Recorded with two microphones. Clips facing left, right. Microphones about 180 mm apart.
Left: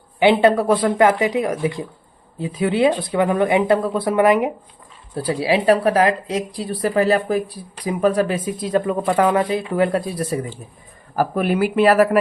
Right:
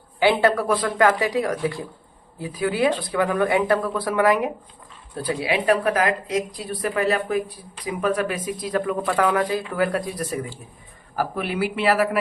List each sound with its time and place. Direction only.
0.2 s a woman's voice: 20° left (ahead or behind)
11.2 s speech: 45° left (ahead or behind)